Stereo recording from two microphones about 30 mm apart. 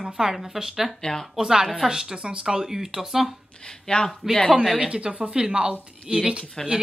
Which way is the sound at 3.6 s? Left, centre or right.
Left.